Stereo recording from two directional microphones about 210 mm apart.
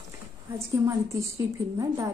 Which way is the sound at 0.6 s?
15° right (ahead or behind).